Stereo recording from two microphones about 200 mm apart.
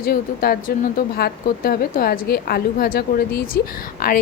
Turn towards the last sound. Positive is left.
turn(degrees=50)  # may be behind; listen again after turning